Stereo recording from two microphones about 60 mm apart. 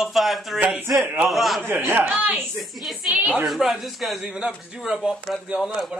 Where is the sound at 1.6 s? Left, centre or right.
Right.